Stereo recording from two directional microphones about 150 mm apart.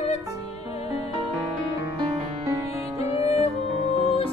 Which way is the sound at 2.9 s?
20° right (ahead or behind).